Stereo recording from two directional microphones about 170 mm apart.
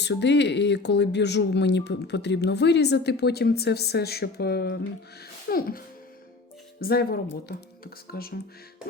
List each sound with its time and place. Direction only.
0.0 s speech: 90° left; by 8.3 s 65° left (ahead or behind)